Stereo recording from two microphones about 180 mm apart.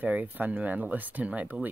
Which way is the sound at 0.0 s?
10° right (ahead or behind).